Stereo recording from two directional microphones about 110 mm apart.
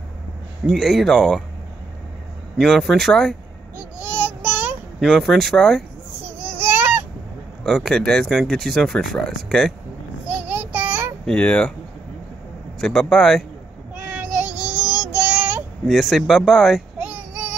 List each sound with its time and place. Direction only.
0.7 s speech: centre (ahead or behind)
2.6 s speech: centre (ahead or behind)
4.2 s child singing: 15° right (ahead or behind)
5.0 s speech: centre (ahead or behind)
6.4 s a sound: 15° right (ahead or behind)
7.6 s speech: 5° left (ahead or behind)
10.2 s child singing: 15° right (ahead or behind)
11.2 s speech: 10° left (ahead or behind)
12.8 s speech: 5° left (ahead or behind)
13.9 s child singing: 10° right (ahead or behind)
15.9 s speech: centre (ahead or behind)
17.0 s child singing: 10° right (ahead or behind)